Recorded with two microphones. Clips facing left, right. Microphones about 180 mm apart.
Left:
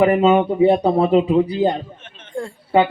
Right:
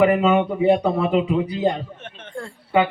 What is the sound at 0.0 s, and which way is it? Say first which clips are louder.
A man's voice: left 2 dB; 30° left (ahead or behind).